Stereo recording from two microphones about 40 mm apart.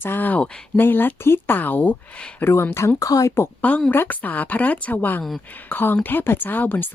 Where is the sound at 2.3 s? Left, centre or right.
Left.